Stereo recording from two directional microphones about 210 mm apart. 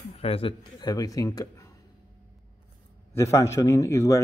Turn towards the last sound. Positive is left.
turn(degrees=15)  # may be behind; listen again after turning